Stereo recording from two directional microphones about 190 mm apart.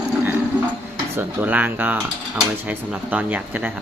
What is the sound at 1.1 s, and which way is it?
Speech, 10° right (ahead or behind).